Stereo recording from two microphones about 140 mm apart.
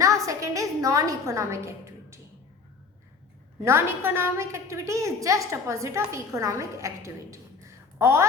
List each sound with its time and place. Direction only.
0.0 s a woman's voice: 20° right (ahead or behind)
3.6 s a woman's voice: 20° right (ahead or behind)